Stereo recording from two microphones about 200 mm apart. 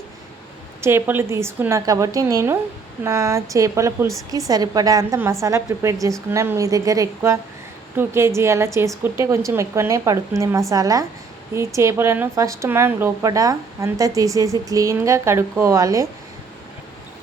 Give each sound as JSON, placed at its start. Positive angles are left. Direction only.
{"t": 0.8, "sound": "a woman's voice", "side_deg": -10}